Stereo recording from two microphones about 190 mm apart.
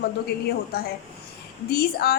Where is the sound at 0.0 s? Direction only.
55° left (ahead or behind).